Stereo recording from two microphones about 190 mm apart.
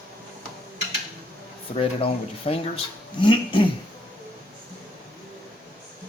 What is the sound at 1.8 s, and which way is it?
Speech, 30° left (ahead or behind).